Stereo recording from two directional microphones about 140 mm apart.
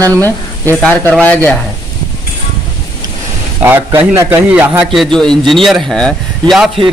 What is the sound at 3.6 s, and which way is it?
Speech, 15° right (ahead or behind).